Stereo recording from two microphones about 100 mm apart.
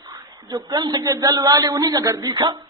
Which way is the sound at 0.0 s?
40° right (ahead or behind).